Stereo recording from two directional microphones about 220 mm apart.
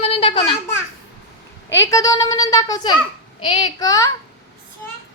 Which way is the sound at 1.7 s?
15° left (ahead or behind).